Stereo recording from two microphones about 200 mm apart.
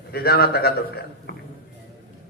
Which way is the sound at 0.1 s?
50° left (ahead or behind).